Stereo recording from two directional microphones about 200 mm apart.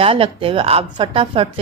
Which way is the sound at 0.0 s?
30° right (ahead or behind).